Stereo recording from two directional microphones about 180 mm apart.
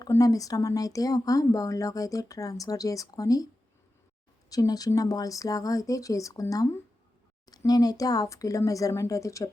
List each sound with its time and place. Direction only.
0.0 s speech: 20° left (ahead or behind)
4.4 s speech: 20° left (ahead or behind)